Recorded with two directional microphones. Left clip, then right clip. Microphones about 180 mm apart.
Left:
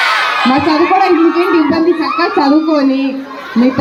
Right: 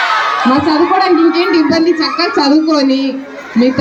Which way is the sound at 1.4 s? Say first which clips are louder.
Even; 25° right (ahead or behind).